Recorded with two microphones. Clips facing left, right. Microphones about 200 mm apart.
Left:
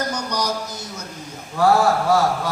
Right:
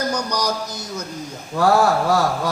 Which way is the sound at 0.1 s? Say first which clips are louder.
Right 2 dB; 40° right (ahead or behind).